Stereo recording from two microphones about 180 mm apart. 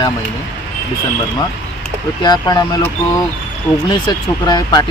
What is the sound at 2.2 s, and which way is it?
Speech, 25° left (ahead or behind).